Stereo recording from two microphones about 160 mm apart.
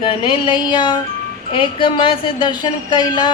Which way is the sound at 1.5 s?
30° left (ahead or behind).